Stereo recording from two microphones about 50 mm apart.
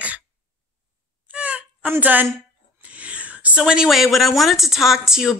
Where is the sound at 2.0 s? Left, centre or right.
Right.